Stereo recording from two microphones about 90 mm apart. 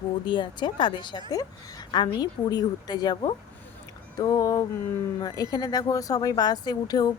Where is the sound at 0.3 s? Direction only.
60° left (ahead or behind).